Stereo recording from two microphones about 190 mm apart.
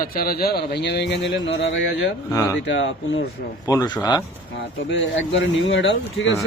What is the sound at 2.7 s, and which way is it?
Speech, 75° left (ahead or behind).